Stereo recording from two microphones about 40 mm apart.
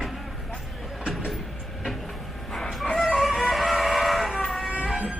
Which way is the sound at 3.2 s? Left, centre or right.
Centre.